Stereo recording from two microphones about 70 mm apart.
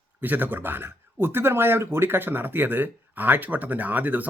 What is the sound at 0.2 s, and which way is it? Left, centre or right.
Speech, right.